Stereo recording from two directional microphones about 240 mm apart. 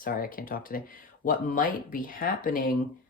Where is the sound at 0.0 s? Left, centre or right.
Left.